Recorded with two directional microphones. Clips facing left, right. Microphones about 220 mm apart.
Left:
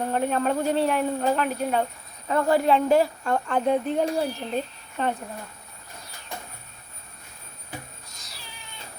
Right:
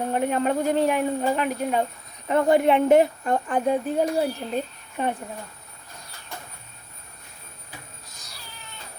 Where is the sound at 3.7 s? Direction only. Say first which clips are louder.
Even; 5° right (ahead or behind).